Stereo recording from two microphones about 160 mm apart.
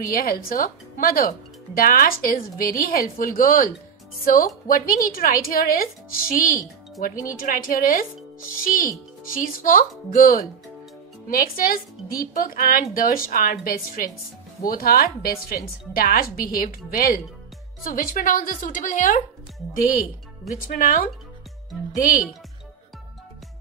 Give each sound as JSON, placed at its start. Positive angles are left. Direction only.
{"t": 0.1, "sound": "a woman's voice", "side_deg": 65}
{"t": 20.6, "sound": "a woman's voice", "side_deg": 60}